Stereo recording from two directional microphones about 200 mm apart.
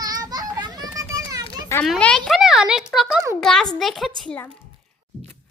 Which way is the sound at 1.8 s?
5° left (ahead or behind).